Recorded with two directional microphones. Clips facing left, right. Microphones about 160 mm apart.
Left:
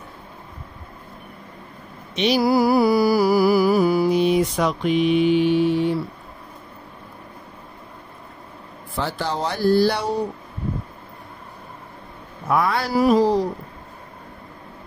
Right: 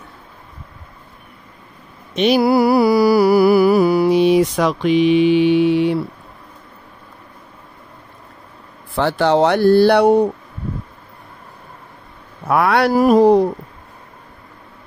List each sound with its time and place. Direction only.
2.1 s mantra: 55° right (ahead or behind); by 5.9 s 75° right (ahead or behind)
8.9 s speech: 70° right (ahead or behind)
12.4 s speech: 70° right (ahead or behind)
12.9 s speech: 50° right (ahead or behind)